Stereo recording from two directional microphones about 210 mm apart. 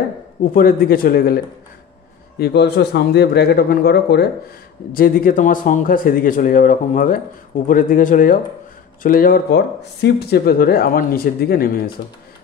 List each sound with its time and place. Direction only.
0.4 s speech: 45° left (ahead or behind)